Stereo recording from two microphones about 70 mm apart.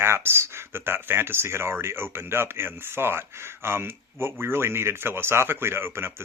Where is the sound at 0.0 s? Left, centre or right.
Right.